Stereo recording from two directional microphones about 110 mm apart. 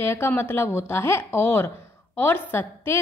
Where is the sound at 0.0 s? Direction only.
20° left (ahead or behind).